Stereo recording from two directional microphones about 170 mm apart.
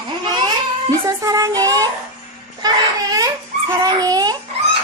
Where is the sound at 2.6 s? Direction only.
20° right (ahead or behind).